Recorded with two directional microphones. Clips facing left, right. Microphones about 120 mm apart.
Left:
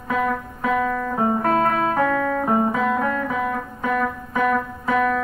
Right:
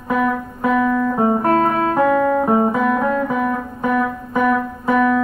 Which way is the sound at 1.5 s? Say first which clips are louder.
Right 3 dB; centre (ahead or behind).